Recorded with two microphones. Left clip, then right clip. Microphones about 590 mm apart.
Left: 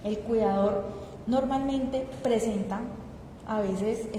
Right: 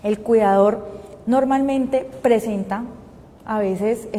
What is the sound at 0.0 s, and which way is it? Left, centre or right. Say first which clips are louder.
A woman's voice: right 10 dB; right.